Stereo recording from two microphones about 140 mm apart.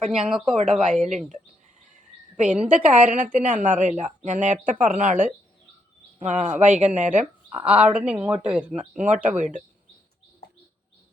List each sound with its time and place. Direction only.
0.0 s speech: 5° right (ahead or behind)
2.3 s speech: 5° right (ahead or behind)
3.3 s speech: 65° right (ahead or behind)
6.1 s speech: 55° right (ahead or behind)
7.5 s speech: 10° right (ahead or behind)
9.4 s speech: 65° right (ahead or behind)